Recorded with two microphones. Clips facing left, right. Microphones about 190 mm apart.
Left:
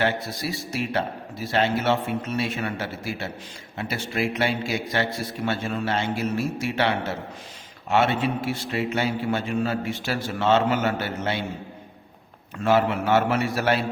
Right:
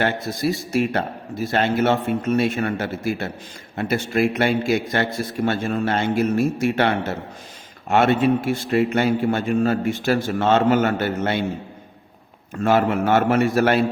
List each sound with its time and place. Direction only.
0.0 s a man's voice: 50° right (ahead or behind)
12.6 s a man's voice: 50° right (ahead or behind)